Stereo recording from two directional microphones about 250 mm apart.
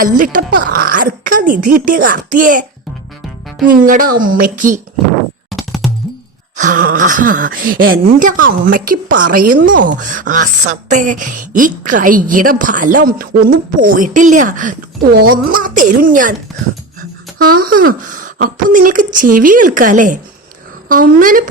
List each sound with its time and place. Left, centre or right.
0.0 s speech: right
3.7 s speech: right
5.5 s music: centre
6.6 s speech: right
17.3 s speech: right